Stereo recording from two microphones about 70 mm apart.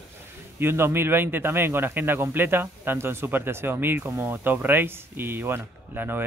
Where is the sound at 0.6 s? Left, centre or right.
Right.